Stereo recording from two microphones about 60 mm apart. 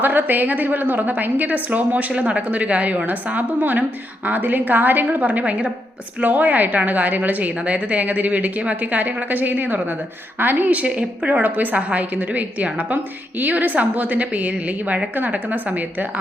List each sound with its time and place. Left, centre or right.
0.0 s a woman's voice: right